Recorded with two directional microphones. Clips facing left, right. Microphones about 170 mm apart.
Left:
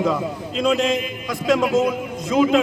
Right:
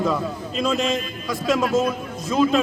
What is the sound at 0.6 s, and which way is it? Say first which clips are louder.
Speech: left 3 dB; centre (ahead or behind).